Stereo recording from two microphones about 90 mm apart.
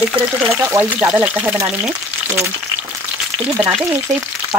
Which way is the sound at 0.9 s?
15° right (ahead or behind).